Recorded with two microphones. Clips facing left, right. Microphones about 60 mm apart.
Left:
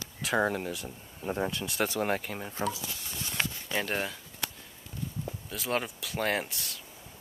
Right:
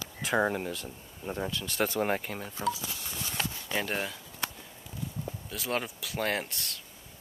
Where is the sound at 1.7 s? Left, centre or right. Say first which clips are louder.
Right 3 dB; centre.